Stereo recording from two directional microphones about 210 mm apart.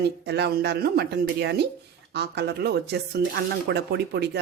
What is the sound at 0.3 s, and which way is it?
Speech, 50° right (ahead or behind).